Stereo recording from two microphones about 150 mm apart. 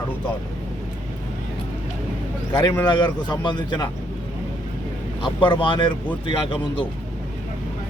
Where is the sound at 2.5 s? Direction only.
30° left (ahead or behind).